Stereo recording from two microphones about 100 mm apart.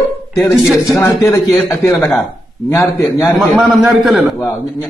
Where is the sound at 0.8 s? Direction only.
35° left (ahead or behind).